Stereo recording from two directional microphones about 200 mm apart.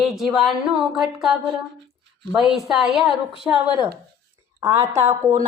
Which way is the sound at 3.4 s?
25° left (ahead or behind).